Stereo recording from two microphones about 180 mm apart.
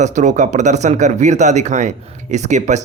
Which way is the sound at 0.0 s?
40° right (ahead or behind).